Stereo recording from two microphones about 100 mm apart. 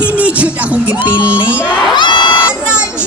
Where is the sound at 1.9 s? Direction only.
50° left (ahead or behind).